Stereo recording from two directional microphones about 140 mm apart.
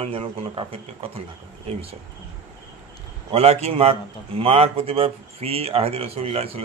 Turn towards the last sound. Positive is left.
turn(degrees=-45)  # may be behind; listen again after turning